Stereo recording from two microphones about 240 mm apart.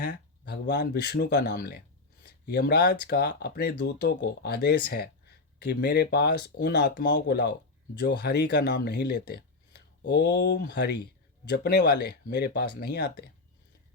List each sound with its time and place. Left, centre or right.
0.0 s speech: left